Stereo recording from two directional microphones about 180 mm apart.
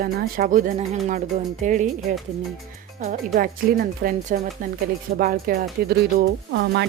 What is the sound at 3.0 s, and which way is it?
Speech, 45° right (ahead or behind).